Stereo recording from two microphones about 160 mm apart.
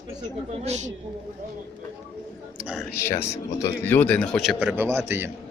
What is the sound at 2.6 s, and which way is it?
Speech, 5° right (ahead or behind).